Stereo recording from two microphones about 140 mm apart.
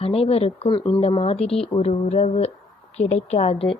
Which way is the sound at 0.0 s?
45° left (ahead or behind).